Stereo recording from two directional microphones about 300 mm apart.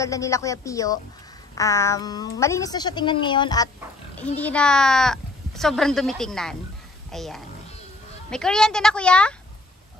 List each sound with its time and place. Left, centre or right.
0.0 s a woman's voice: centre